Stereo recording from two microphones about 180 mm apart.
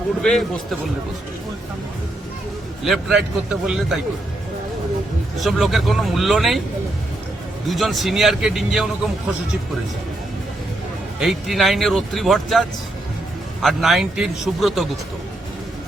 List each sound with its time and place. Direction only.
0.2 s a man's voice: 5° left (ahead or behind)
2.8 s a man's voice: centre (ahead or behind)
5.4 s a man's voice: centre (ahead or behind)
7.7 s a man's voice: centre (ahead or behind)
11.2 s a man's voice: centre (ahead or behind)